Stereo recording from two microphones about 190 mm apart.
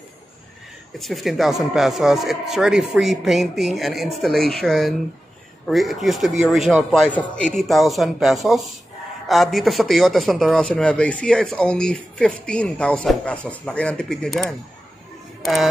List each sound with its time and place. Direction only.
0.9 s a man's voice: centre (ahead or behind)